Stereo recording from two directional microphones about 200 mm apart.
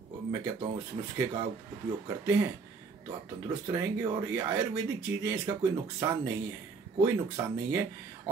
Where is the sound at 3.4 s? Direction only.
15° right (ahead or behind).